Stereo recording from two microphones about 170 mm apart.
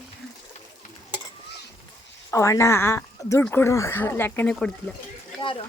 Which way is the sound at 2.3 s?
15° left (ahead or behind).